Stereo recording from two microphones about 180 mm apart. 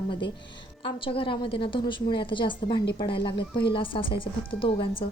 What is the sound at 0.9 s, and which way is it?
Speech, 30° left (ahead or behind).